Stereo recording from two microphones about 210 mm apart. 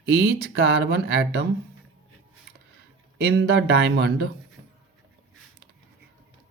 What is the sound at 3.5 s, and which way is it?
Speech, 50° right (ahead or behind).